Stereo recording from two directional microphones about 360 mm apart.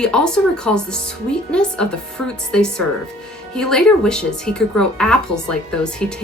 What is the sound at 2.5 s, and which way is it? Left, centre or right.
Speech, centre.